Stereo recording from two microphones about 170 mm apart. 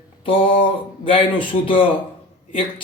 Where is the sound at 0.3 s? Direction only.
30° left (ahead or behind).